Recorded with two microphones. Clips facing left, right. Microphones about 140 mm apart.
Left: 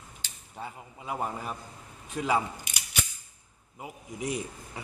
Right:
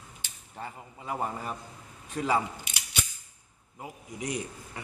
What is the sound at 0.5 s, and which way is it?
A man's voice, 5° left (ahead or behind).